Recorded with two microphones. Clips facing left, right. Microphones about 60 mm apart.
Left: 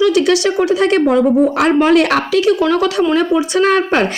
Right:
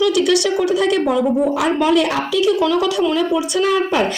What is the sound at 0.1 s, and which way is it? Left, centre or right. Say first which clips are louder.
A woman's voice: left 3 dB; left.